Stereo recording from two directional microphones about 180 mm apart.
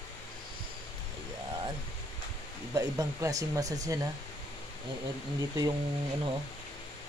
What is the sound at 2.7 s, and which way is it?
Speech, 20° right (ahead or behind).